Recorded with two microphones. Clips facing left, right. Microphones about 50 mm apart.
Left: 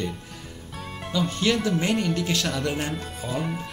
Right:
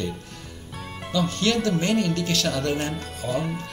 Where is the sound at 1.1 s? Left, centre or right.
Centre.